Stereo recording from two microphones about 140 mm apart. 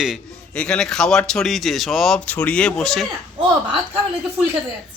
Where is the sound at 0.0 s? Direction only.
5° left (ahead or behind).